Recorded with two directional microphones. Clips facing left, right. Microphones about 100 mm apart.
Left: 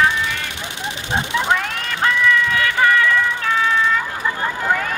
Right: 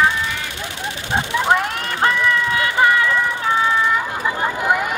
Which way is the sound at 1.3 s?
20° right (ahead or behind).